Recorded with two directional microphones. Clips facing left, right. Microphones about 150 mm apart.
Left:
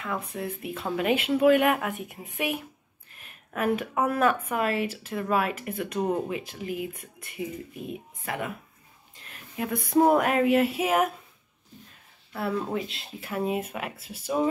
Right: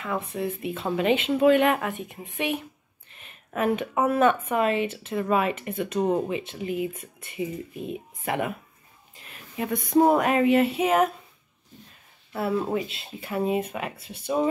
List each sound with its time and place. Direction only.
0.0 s speech: centre (ahead or behind)
8.3 s speech: 20° right (ahead or behind)
9.6 s speech: centre (ahead or behind)
12.3 s speech: 5° right (ahead or behind)